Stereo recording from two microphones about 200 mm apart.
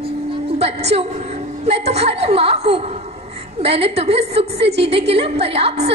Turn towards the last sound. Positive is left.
turn(degrees=-30)  # may be behind; listen again after turning